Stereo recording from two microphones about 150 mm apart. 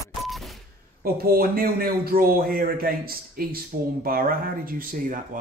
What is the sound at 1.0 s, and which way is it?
A man's voice, 90° right.